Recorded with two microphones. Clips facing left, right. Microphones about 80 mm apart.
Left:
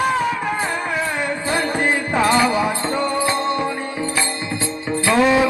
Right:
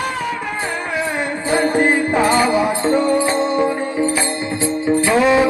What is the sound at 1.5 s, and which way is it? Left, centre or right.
Music, right.